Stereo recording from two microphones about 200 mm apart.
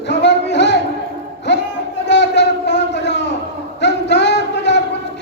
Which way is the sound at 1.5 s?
60° left (ahead or behind).